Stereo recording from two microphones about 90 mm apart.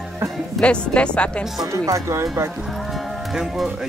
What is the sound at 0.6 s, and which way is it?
Speech, 10° left (ahead or behind).